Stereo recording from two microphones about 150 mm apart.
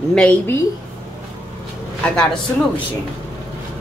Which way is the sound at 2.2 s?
5° left (ahead or behind).